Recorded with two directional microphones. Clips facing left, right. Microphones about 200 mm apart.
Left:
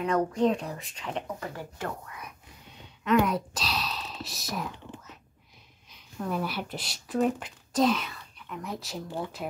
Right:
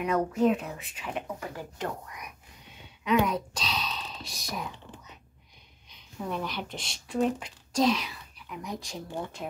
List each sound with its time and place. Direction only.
0.0 s speech: 5° right (ahead or behind)
3.0 s speech: centre (ahead or behind)
6.1 s speech: centre (ahead or behind)